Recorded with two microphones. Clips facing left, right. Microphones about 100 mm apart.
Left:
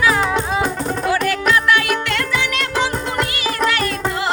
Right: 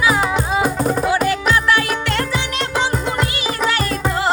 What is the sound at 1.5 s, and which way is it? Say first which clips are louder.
Music: left 4 dB; 35° right (ahead or behind).